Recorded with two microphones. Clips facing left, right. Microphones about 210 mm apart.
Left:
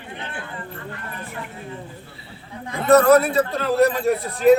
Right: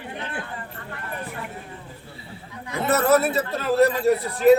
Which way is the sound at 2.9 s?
5° right (ahead or behind).